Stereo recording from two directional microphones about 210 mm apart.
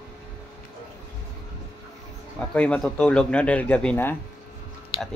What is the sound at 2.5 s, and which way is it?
Speech, 5° left (ahead or behind).